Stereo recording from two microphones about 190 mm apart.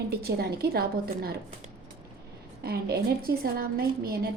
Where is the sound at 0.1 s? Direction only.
55° right (ahead or behind).